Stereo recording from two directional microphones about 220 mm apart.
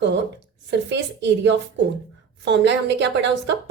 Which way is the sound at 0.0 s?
55° right (ahead or behind).